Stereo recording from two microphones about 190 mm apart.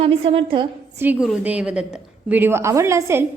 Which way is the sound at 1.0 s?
5° right (ahead or behind).